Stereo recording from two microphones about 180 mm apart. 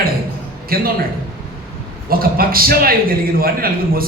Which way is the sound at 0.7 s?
55° right (ahead or behind).